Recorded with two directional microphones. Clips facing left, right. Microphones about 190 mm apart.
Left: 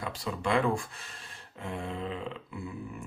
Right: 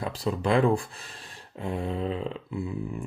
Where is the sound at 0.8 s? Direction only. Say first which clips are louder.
Right 2 dB; 35° right (ahead or behind).